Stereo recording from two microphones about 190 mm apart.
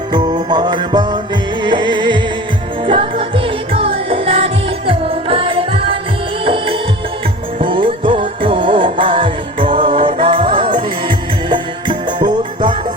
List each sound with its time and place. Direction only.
0.1 s music: 20° right (ahead or behind)